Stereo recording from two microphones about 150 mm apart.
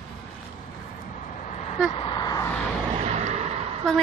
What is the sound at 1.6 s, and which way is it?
Vehicle, 45° left (ahead or behind).